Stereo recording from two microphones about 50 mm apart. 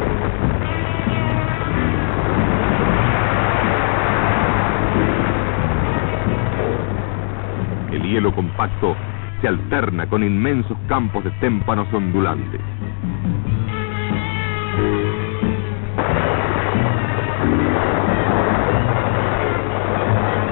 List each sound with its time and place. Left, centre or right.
0.0 s music: right
7.9 s speech: right
14.8 s music: right